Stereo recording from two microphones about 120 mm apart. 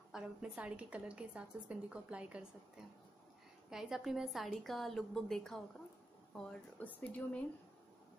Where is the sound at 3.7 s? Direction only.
5° right (ahead or behind); by 7.4 s 10° left (ahead or behind).